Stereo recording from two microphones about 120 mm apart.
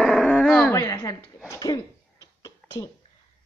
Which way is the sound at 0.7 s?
25° left (ahead or behind).